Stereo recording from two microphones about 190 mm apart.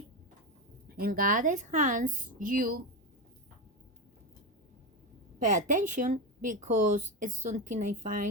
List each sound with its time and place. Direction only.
0.9 s speech: 50° right (ahead or behind)
5.5 s speech: 45° right (ahead or behind)